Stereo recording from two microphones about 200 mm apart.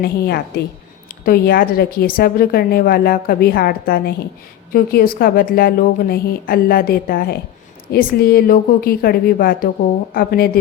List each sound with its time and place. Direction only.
0.0 s a woman's voice: 50° left (ahead or behind)